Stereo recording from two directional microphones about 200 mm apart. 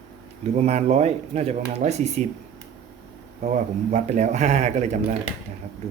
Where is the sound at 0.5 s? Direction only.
30° right (ahead or behind).